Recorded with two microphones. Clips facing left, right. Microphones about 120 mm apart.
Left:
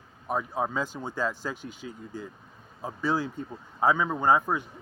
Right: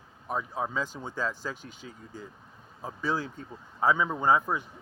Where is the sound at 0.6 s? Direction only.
30° left (ahead or behind).